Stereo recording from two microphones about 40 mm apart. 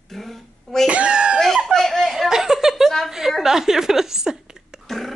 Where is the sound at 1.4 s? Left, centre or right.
Centre.